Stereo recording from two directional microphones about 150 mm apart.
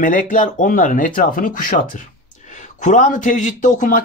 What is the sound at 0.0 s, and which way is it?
Speech, 65° left (ahead or behind).